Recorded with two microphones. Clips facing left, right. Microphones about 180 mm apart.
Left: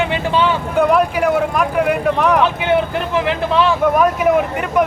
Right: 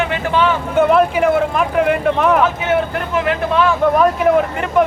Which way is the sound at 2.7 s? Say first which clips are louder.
Left 1 dB; 20° left (ahead or behind).